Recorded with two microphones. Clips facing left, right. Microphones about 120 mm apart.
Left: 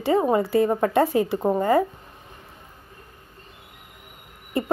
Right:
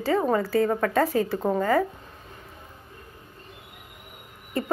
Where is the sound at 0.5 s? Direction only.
20° left (ahead or behind).